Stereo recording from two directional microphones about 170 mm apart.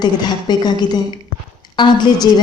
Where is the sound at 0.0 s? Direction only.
25° left (ahead or behind).